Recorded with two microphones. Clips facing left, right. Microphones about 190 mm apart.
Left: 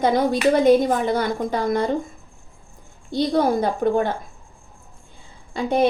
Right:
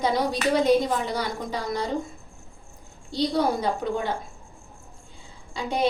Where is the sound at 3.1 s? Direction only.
55° left (ahead or behind).